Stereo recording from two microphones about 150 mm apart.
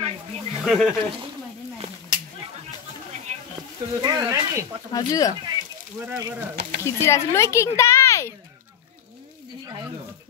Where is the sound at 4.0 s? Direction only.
25° right (ahead or behind).